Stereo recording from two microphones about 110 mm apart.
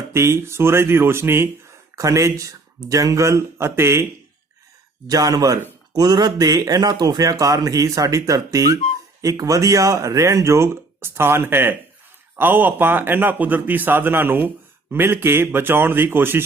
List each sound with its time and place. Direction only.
0.1 s speech: 25° right (ahead or behind)
5.0 s speech: 35° right (ahead or behind); by 16.4 s 20° right (ahead or behind)